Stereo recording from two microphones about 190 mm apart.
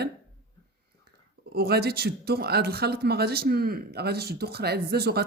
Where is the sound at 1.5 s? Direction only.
55° right (ahead or behind).